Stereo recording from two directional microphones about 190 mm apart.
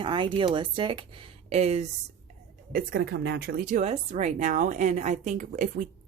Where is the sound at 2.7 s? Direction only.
50° right (ahead or behind).